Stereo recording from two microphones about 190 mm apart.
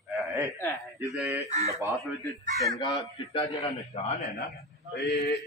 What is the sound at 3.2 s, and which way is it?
Speech, 30° left (ahead or behind).